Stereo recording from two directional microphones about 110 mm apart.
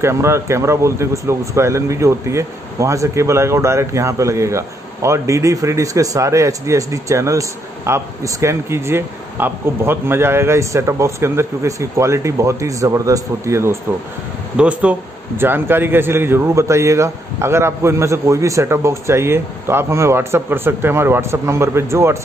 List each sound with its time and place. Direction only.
0.0 s speech: 25° right (ahead or behind)
14.6 s speech: 10° right (ahead or behind)